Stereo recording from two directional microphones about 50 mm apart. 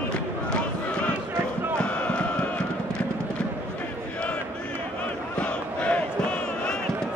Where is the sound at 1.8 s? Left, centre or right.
Left.